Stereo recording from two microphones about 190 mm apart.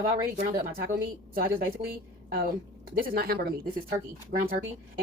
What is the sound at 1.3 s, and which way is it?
A woman's voice, 50° right (ahead or behind).